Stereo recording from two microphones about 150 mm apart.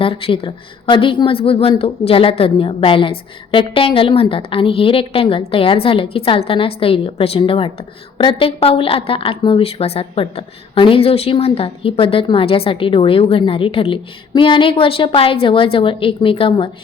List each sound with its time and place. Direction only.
0.0 s speech: 40° left (ahead or behind)